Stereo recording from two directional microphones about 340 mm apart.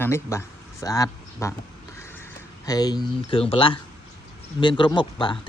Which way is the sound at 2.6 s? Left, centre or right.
Centre.